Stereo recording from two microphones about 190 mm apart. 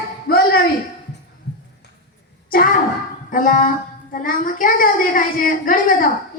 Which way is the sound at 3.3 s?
45° left (ahead or behind).